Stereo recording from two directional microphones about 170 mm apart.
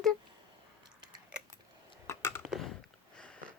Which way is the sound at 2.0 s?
15° left (ahead or behind).